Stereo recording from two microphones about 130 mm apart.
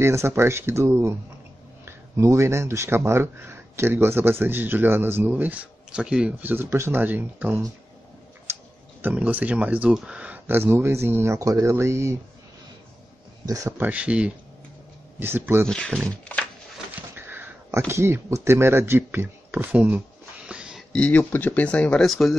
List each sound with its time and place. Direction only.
0.0 s speech: 20° right (ahead or behind)
8.5 s tick-tock: 20° right (ahead or behind)
9.0 s speech: 10° right (ahead or behind)
13.5 s speech: 25° right (ahead or behind)
13.7 s speech: 10° right (ahead or behind)
15.6 s speech: 5° left (ahead or behind)
16.3 s a sound: 15° left (ahead or behind)
17.1 s speech: 15° right (ahead or behind)
20.4 s a sound: 5° right (ahead or behind)
20.9 s speech: 10° left (ahead or behind)